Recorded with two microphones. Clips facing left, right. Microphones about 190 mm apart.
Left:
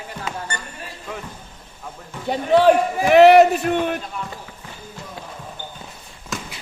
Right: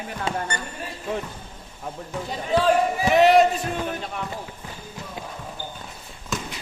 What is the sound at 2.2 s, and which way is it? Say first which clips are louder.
A man's voice: left 7 dB; 65° left (ahead or behind).